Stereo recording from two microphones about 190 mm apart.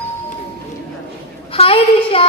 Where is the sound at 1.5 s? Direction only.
30° left (ahead or behind).